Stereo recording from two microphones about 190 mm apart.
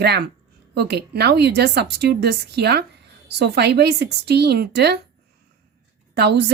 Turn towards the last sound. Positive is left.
turn(degrees=-60)  # may be behind; listen again after turning